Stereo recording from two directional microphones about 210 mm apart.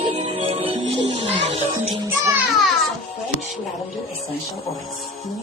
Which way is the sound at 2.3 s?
5° right (ahead or behind).